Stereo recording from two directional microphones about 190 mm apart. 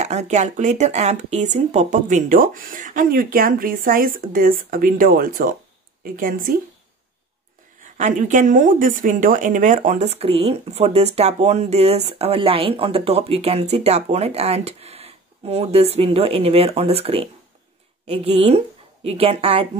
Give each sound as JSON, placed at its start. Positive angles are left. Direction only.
{"t": 0.0, "sound": "speech", "side_deg": -40}
{"t": 8.0, "sound": "speech", "side_deg": -40}